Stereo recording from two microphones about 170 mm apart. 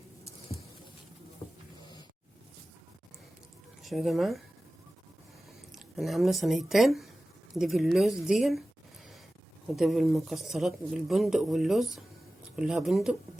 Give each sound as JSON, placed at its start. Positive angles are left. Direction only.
{"t": 1.8, "sound": "a sound", "side_deg": 25}
{"t": 3.8, "sound": "speech", "side_deg": 0}
{"t": 5.7, "sound": "speech", "side_deg": 0}
{"t": 9.7, "sound": "speech", "side_deg": 0}